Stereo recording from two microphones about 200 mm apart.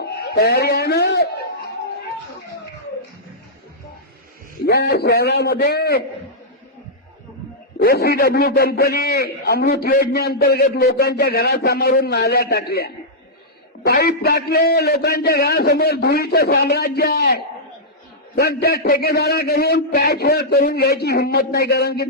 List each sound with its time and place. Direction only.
0.0 s a sound: 55° left (ahead or behind)
4.6 s a man's voice: 55° left (ahead or behind)
7.8 s a man's voice: 50° left (ahead or behind)